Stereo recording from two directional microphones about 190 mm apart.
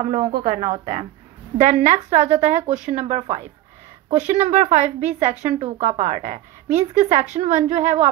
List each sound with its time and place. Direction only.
0.0 s a woman's voice: 35° right (ahead or behind)